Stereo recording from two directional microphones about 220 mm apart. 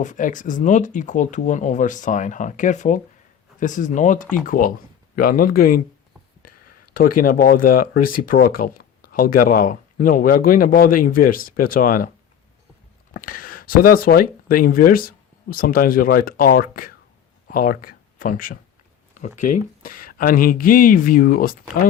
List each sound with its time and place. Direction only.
0.0 s speech: 35° left (ahead or behind)
6.4 s a sound: 90° left
7.2 s speech: 40° left (ahead or behind)
13.1 s speech: 40° left (ahead or behind)